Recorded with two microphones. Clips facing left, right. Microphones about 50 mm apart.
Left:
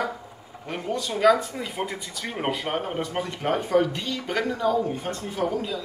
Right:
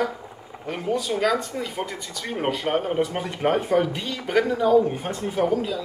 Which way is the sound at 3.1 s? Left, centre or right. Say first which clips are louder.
Right 3 dB; centre.